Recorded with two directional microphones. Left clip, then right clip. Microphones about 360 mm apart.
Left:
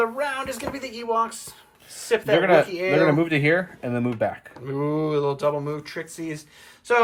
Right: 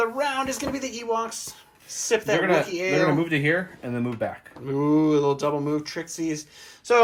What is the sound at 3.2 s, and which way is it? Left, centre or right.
Speech, centre.